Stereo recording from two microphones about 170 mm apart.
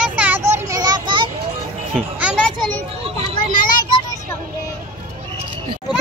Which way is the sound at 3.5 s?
55° left (ahead or behind).